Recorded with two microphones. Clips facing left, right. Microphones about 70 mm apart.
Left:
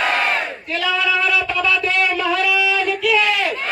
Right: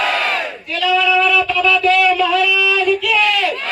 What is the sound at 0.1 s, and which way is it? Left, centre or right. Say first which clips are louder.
Crowd: right 1 dB; left.